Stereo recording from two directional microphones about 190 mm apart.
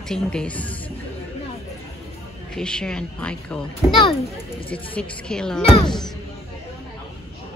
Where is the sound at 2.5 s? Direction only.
5° left (ahead or behind).